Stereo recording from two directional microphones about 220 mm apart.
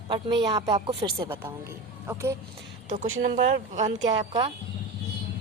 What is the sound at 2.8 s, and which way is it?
Speech, 40° right (ahead or behind).